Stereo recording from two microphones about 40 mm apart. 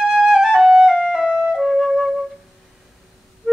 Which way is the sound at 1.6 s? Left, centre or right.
Centre.